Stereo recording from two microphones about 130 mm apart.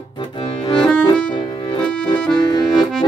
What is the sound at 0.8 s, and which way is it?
Music, 5° left (ahead or behind).